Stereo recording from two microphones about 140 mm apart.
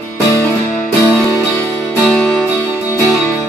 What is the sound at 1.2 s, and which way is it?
Music, 15° left (ahead or behind).